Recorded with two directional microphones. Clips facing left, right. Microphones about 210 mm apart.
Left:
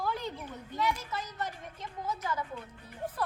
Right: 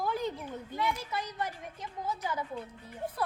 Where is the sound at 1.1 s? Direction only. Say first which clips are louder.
Right 2 dB; 10° right (ahead or behind).